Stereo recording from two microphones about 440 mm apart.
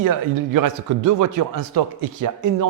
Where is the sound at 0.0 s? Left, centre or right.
Right.